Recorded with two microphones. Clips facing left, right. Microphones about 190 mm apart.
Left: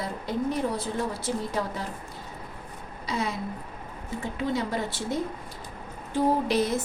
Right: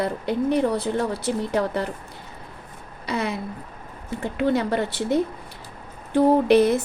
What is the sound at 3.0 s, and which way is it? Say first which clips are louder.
A woman's voice: right 4 dB; 65° right (ahead or behind).